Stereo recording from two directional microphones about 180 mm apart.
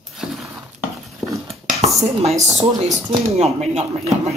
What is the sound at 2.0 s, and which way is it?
Dishes, 35° right (ahead or behind).